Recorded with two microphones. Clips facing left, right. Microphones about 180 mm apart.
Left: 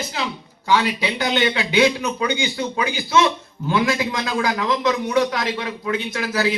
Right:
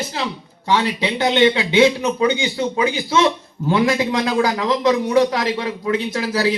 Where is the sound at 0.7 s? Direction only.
30° right (ahead or behind).